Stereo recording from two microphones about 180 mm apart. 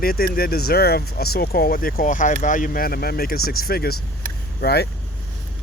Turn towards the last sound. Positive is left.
turn(degrees=65)  # may be behind; listen again after turning